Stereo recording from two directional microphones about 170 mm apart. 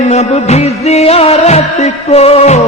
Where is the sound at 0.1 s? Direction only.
40° left (ahead or behind).